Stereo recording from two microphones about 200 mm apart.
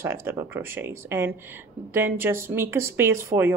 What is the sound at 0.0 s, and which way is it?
Speech, 10° right (ahead or behind).